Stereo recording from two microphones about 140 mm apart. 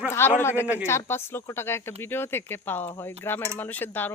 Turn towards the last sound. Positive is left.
turn(degrees=15)  # may be behind; listen again after turning